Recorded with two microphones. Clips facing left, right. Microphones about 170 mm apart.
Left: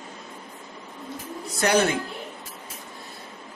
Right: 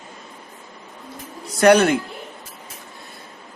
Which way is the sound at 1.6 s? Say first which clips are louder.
Right 8 dB; 65° right (ahead or behind).